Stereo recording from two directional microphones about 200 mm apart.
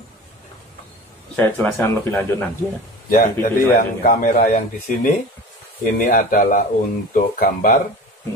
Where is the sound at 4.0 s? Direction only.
45° left (ahead or behind).